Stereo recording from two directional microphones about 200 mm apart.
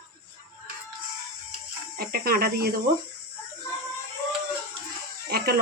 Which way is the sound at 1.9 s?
50° right (ahead or behind).